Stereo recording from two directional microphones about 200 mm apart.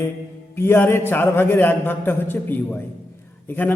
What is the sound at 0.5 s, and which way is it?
A man's voice, 10° left (ahead or behind).